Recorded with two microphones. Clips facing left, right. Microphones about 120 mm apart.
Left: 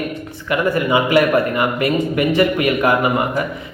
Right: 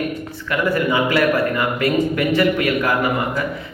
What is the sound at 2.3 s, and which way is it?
Speech, 15° left (ahead or behind).